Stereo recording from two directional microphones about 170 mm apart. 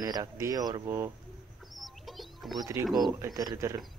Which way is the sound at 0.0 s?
20° right (ahead or behind).